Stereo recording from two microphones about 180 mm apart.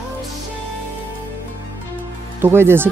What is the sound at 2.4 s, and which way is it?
Speech, 15° right (ahead or behind).